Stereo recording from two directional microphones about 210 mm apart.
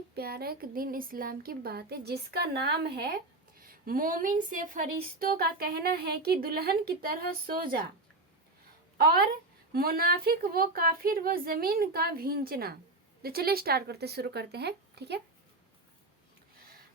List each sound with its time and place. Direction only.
0.2 s speech: 50° right (ahead or behind)
9.0 s speech: 45° right (ahead or behind)